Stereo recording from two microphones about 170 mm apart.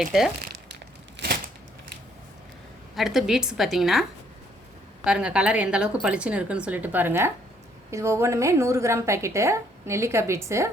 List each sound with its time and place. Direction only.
0.0 s a woman's voice: centre (ahead or behind)
2.9 s a woman's voice: centre (ahead or behind)
5.0 s a woman's voice: 5° right (ahead or behind)